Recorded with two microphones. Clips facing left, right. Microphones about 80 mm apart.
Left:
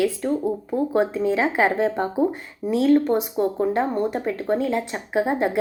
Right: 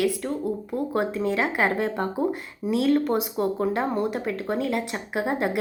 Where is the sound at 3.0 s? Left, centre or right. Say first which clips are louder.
Left 3 dB; centre.